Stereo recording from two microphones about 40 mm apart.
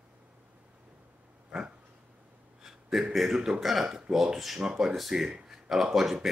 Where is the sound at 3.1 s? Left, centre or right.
Centre.